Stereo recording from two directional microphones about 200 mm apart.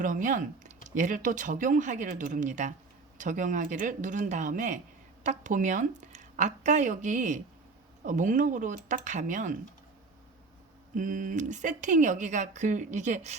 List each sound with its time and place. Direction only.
0.0 s speech: 40° right (ahead or behind)
10.9 s speech: 40° right (ahead or behind)